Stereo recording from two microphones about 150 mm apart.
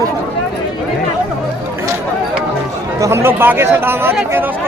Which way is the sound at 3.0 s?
15° right (ahead or behind).